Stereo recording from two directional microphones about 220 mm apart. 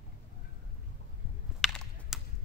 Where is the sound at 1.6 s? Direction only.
Centre (ahead or behind).